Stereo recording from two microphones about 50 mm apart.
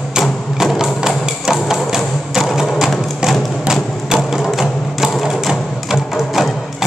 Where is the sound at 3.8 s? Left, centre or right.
Centre.